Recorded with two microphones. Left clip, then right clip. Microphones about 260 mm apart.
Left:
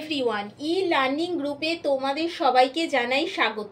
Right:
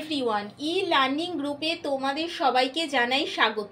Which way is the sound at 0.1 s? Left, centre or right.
Right.